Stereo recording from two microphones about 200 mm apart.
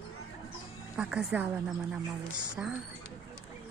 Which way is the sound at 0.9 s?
5° right (ahead or behind).